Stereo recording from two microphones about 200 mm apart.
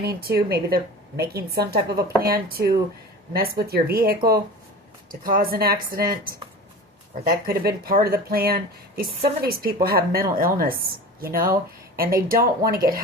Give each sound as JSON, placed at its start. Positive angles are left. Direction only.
{"t": 0.0, "sound": "speech", "side_deg": -50}
{"t": 5.2, "sound": "speech", "side_deg": -45}
{"t": 7.3, "sound": "speech", "side_deg": -50}